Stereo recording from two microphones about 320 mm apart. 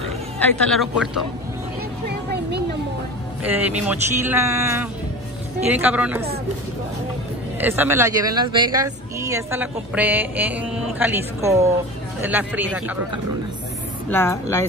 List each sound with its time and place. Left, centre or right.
0.4 s speech: centre
2.0 s a sound: right
3.4 s speech: centre
7.6 s speech: centre
14.1 s speech: centre